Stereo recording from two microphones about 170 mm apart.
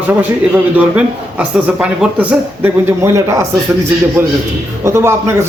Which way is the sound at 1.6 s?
10° right (ahead or behind).